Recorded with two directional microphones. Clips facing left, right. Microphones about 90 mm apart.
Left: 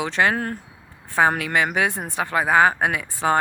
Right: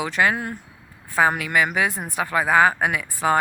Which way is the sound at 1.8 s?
25° left (ahead or behind).